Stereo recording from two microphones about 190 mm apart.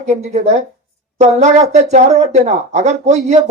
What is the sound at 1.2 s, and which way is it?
Speech, 40° right (ahead or behind).